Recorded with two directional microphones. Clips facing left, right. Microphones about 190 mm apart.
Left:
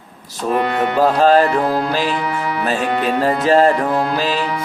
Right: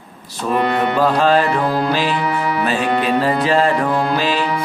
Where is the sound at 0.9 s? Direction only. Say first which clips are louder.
Left 4 dB; 40° left (ahead or behind).